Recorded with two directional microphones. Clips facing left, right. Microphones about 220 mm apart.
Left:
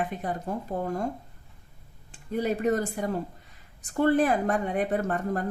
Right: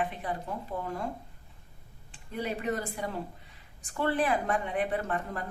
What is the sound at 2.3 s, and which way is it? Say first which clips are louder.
Speech: left 7 dB; 45° left (ahead or behind).